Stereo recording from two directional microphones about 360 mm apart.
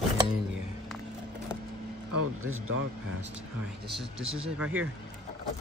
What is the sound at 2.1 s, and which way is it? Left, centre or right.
Speech, right.